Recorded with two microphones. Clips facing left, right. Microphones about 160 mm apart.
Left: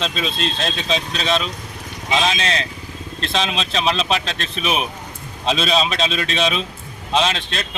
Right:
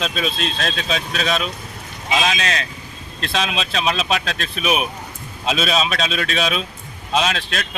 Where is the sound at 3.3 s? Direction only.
5° right (ahead or behind).